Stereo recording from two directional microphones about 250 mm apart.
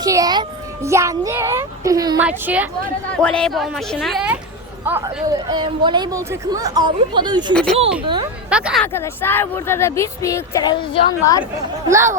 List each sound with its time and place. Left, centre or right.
0.0 s a child's voice: centre
8.4 s speech: centre
11.9 s a child's voice: centre